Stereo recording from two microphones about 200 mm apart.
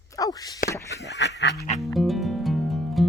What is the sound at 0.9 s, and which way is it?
Speech, 60° left (ahead or behind).